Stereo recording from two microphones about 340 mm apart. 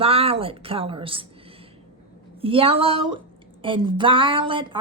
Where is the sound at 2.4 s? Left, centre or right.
Centre.